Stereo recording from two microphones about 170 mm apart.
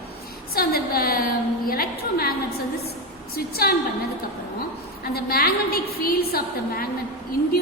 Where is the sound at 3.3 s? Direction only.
65° left (ahead or behind).